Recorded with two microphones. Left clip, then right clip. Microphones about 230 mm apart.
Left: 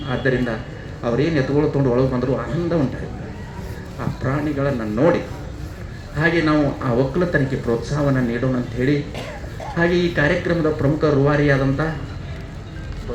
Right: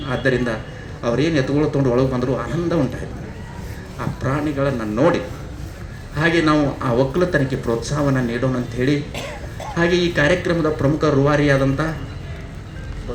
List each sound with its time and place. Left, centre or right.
0.1 s speech: right
4.2 s speech: right